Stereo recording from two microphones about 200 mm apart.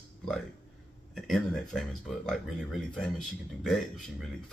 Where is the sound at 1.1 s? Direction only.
Centre (ahead or behind).